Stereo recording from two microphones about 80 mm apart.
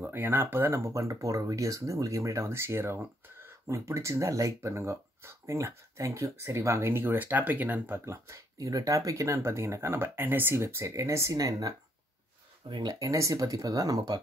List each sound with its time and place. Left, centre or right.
0.1 s speech: right
8.0 s speech: right
11.3 s speech: right
12.6 s speech: right
13.0 s speech: right